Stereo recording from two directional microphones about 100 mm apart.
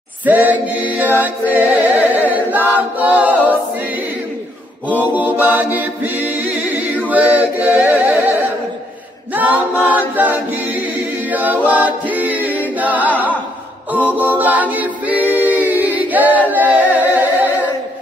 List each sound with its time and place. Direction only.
0.2 s a capella: 15° right (ahead or behind)
5.1 s a capella: 15° right (ahead or behind)
16.9 s humming: 15° right (ahead or behind)